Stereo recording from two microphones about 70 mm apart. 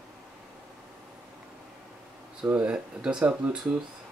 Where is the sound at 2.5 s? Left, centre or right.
Centre.